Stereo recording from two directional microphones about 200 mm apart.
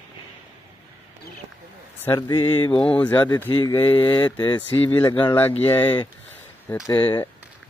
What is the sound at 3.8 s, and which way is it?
Speech, 25° left (ahead or behind).